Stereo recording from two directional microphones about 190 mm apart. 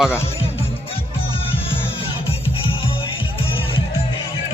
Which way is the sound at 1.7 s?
30° left (ahead or behind).